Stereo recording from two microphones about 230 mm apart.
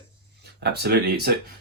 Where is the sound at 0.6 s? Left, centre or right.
Right.